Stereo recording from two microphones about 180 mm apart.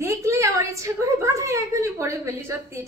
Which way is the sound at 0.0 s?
15° right (ahead or behind).